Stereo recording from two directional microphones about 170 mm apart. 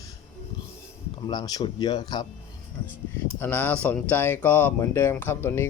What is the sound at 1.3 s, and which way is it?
Speech, 25° left (ahead or behind).